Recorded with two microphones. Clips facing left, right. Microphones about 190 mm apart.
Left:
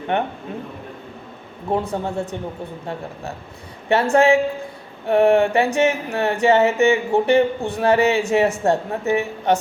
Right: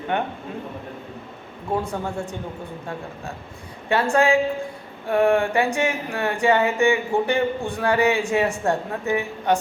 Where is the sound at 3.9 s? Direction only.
20° left (ahead or behind).